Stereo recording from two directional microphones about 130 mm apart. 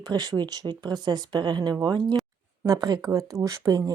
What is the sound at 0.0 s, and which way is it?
Speech, 35° right (ahead or behind).